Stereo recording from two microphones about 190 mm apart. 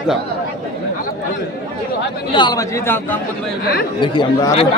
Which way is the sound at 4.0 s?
25° left (ahead or behind).